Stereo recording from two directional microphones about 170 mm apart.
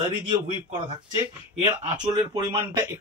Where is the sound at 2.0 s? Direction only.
25° right (ahead or behind).